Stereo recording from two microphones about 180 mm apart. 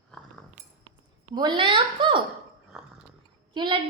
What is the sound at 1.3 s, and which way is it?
Speech, 25° right (ahead or behind).